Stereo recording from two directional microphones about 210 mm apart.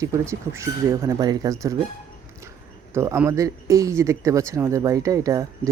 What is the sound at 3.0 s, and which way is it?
Speech, 10° right (ahead or behind).